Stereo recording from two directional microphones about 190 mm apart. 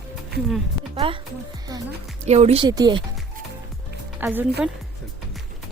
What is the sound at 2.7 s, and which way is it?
Speech, 20° right (ahead or behind).